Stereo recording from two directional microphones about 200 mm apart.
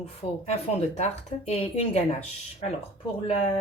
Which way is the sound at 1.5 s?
35° left (ahead or behind).